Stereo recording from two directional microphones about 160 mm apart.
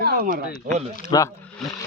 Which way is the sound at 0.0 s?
70° right (ahead or behind).